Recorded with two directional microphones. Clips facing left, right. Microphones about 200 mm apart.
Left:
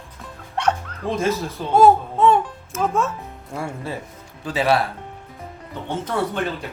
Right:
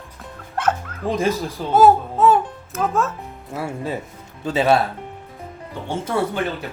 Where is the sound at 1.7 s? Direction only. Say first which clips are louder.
Even; 5° right (ahead or behind).